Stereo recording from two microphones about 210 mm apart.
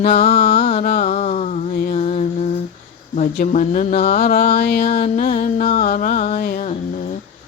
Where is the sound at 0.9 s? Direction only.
35° left (ahead or behind).